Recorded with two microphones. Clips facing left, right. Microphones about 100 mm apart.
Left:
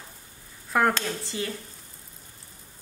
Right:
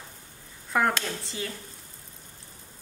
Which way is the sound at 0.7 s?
Centre (ahead or behind).